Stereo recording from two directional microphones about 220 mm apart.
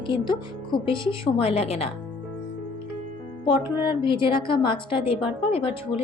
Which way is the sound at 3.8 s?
20° left (ahead or behind).